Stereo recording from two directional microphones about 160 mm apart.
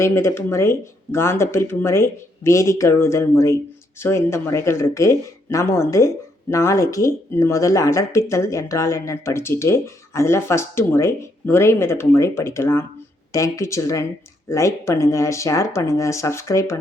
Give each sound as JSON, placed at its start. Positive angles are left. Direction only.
{"t": 0.0, "sound": "speech", "side_deg": 15}